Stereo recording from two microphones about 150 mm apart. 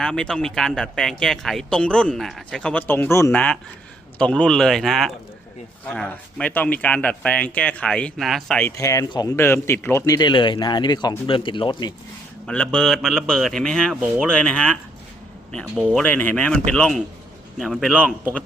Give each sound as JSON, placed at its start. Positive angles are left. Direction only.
{"t": 0.0, "sound": "speech", "side_deg": 5}
{"t": 8.7, "sound": "speech", "side_deg": 20}
{"t": 10.2, "sound": "speech", "side_deg": 30}
{"t": 12.5, "sound": "speech", "side_deg": 5}
{"t": 15.9, "sound": "speech", "side_deg": 10}
{"t": 17.9, "sound": "speech", "side_deg": -10}